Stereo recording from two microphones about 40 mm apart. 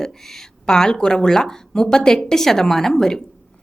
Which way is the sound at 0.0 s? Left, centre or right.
Centre.